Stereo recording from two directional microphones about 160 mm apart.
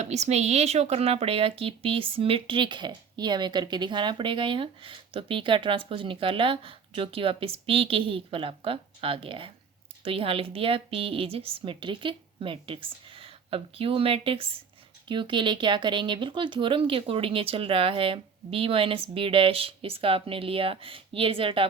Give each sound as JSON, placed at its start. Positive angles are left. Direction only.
{"t": 0.0, "sound": "a woman's voice", "side_deg": -45}